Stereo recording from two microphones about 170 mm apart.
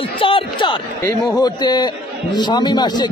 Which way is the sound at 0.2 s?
30° left (ahead or behind).